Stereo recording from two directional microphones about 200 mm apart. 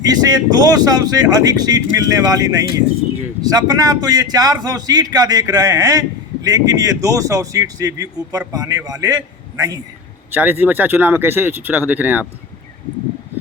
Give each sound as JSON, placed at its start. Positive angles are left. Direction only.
{"t": 0.0, "sound": "a man's voice", "side_deg": -20}
{"t": 10.3, "sound": "speech", "side_deg": -10}